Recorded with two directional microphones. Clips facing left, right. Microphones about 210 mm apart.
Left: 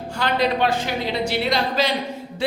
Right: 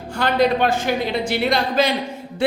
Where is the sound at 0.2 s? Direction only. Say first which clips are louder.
Right 3 dB; 50° right (ahead or behind).